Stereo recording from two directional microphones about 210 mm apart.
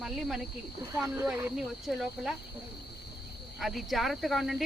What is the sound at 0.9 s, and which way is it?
Speech, 10° right (ahead or behind).